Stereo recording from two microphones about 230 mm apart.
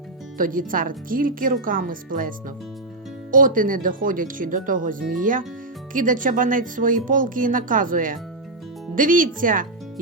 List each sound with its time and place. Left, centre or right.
0.3 s speech: right
3.3 s speech: right